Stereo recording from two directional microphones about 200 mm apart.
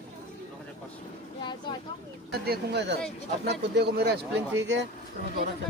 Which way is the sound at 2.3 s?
55° right (ahead or behind).